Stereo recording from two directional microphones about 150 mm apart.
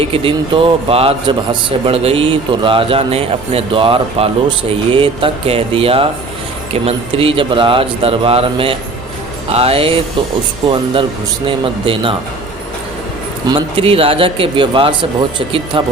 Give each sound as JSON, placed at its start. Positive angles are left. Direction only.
{"t": 0.0, "sound": "a man's voice", "side_deg": -35}
{"t": 11.4, "sound": "a man's voice", "side_deg": -35}
{"t": 13.5, "sound": "a man's voice", "side_deg": -40}